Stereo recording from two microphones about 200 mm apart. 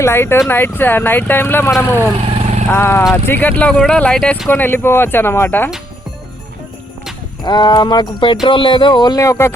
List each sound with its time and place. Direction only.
0.0 s speech: 10° left (ahead or behind)
2.2 s vehicle: 30° right (ahead or behind)
2.6 s speech: 10° left (ahead or behind)
7.4 s speech: 20° left (ahead or behind)